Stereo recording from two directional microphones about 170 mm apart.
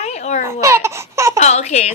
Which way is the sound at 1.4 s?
40° left (ahead or behind).